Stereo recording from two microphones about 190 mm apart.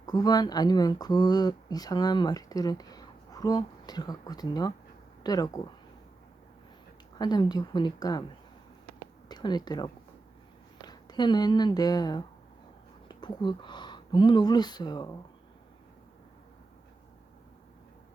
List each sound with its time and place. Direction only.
0.0 s speech: 20° left (ahead or behind)
7.2 s speech: 20° left (ahead or behind)
9.3 s speech: 20° left (ahead or behind)